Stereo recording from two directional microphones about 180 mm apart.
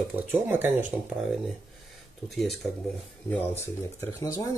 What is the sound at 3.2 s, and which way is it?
Speech, 10° left (ahead or behind).